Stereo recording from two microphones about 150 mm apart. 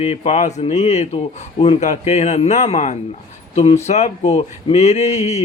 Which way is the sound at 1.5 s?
35° left (ahead or behind).